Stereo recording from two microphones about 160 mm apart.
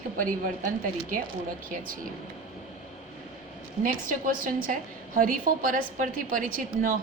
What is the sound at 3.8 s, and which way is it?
A woman's voice, 60° right (ahead or behind).